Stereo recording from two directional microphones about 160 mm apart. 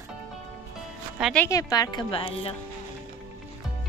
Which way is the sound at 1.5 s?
20° left (ahead or behind).